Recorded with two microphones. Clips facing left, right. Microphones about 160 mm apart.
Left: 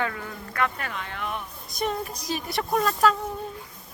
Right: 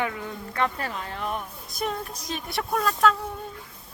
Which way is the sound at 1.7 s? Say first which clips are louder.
Left 2 dB; centre (ahead or behind).